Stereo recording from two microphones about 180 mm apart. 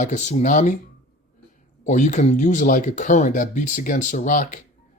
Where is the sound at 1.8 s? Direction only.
40° left (ahead or behind).